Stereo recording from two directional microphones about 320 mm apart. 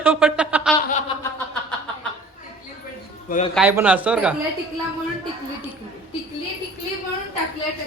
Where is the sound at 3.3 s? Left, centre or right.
Left.